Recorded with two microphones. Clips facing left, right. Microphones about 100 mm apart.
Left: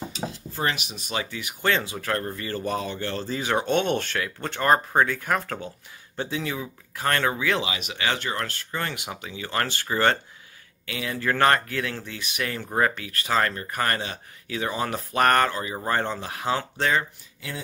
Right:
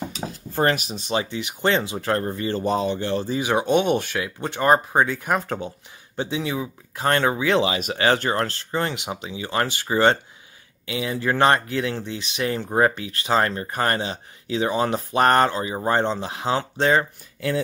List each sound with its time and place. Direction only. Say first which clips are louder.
0.1 s speech: right 3 dB; 45° right (ahead or behind); by 17.0 s 25° right (ahead or behind)